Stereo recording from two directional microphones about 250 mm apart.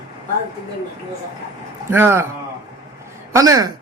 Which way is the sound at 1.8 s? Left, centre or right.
Centre.